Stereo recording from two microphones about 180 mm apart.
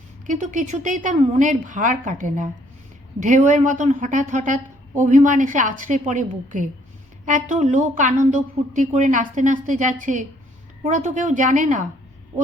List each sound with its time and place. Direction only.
0.3 s a woman's voice: 45° right (ahead or behind)